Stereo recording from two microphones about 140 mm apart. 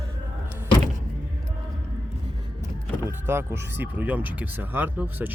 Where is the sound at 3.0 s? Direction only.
15° right (ahead or behind).